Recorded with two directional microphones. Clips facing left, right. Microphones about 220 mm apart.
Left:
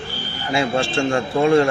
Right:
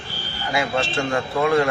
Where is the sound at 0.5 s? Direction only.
25° left (ahead or behind).